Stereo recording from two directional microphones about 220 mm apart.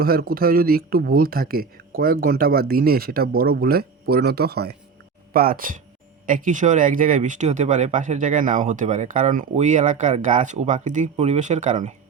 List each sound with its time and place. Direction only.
0.0 s speech: 45° right (ahead or behind)